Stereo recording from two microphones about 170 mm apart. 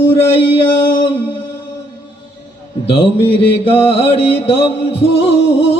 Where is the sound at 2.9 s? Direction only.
35° left (ahead or behind).